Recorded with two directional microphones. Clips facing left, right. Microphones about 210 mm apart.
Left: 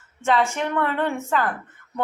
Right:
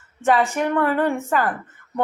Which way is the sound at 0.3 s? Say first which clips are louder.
Right 2 dB; 10° right (ahead or behind).